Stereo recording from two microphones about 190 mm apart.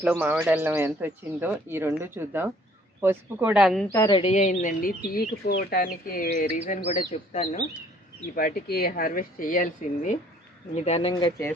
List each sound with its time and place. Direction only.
0.0 s speech: 10° right (ahead or behind)
3.9 s speech: 20° left (ahead or behind); by 7.7 s 40° left (ahead or behind)
8.4 s speech: 55° left (ahead or behind); by 11.1 s 35° left (ahead or behind)
11.1 s speech: 15° left (ahead or behind)